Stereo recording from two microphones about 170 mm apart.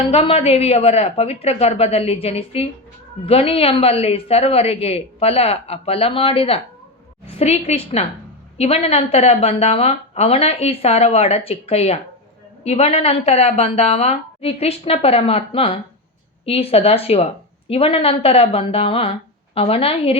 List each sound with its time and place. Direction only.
0.1 s speech: 35° left (ahead or behind)